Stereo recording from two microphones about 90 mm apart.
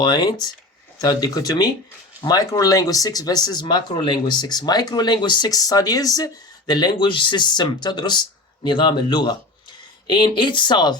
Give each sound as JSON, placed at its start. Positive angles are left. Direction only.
{"t": 0.0, "sound": "speech", "side_deg": 50}